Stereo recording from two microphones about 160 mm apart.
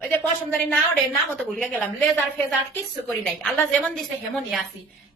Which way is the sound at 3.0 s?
Centre (ahead or behind).